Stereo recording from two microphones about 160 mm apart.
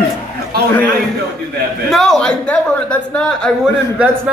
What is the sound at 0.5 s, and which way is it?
Speech, 75° right (ahead or behind).